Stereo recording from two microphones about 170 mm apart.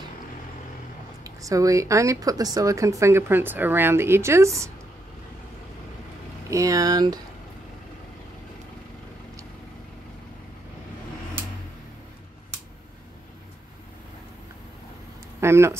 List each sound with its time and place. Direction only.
1.2 s speech: 20° right (ahead or behind)
6.5 s speech: 20° right (ahead or behind)
15.4 s speech: 15° right (ahead or behind)